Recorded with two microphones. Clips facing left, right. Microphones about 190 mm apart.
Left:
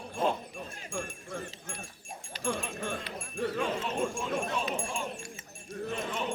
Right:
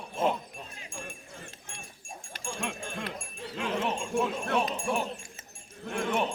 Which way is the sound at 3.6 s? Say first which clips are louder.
Right 3 dB; 70° right (ahead or behind).